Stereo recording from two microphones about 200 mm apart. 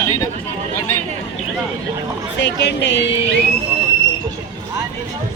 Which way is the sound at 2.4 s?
60° left (ahead or behind).